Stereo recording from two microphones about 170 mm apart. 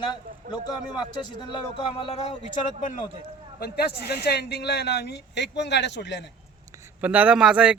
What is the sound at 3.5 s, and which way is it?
Speech, 65° left (ahead or behind).